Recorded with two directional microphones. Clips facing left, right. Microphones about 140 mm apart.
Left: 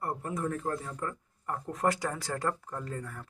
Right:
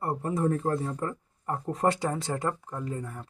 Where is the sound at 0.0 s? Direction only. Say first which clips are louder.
Right 6 dB; 30° right (ahead or behind).